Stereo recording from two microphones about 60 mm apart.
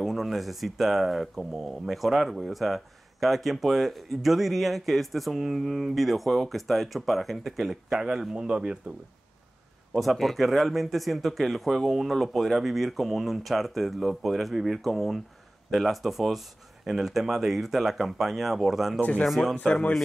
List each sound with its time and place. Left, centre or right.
0.0 s speech: centre
9.9 s speech: centre
18.9 s speech: left
19.2 s speech: centre
19.6 s a man's voice: centre